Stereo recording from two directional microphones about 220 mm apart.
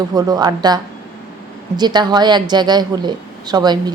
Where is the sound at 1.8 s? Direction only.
20° right (ahead or behind).